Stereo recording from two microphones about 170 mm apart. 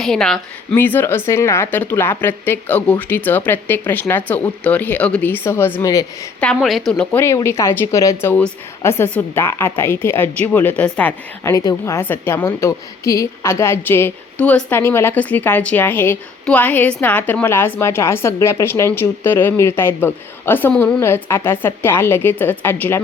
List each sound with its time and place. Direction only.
0.0 s a woman's voice: 5° left (ahead or behind); by 6.1 s 20° left (ahead or behind)
6.4 s a woman's voice: centre (ahead or behind)
7.2 s a woman's voice: 15° left (ahead or behind)